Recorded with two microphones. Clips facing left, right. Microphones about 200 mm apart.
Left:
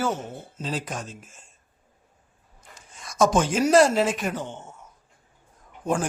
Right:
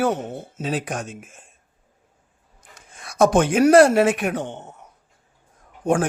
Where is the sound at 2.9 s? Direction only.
60° right (ahead or behind).